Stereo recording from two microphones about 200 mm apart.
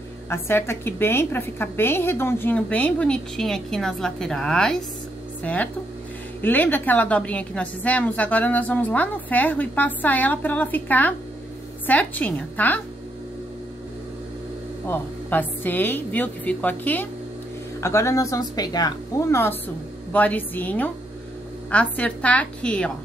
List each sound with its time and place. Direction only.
0.3 s a woman's voice: 10° left (ahead or behind)
14.9 s a woman's voice: 10° left (ahead or behind)